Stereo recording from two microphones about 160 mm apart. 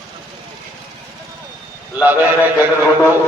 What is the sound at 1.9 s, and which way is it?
Speech, 10° right (ahead or behind).